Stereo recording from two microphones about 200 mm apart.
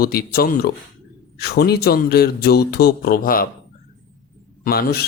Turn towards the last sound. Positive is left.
turn(degrees=50)  # may be behind; listen again after turning